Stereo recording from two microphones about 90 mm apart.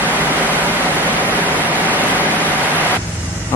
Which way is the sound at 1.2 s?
20° right (ahead or behind).